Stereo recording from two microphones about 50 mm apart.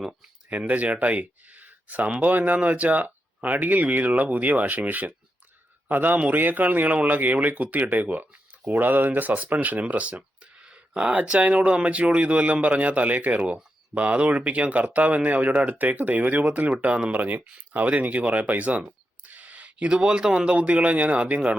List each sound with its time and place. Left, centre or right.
0.7 s speech: right